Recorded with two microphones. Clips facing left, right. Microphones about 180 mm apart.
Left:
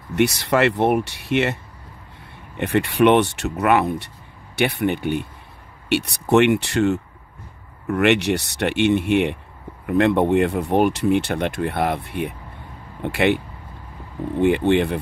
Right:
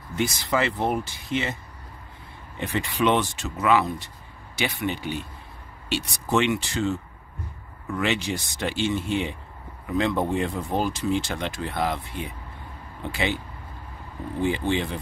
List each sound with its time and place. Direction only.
0.1 s speech: 70° left (ahead or behind)
14.4 s speech: 60° left (ahead or behind)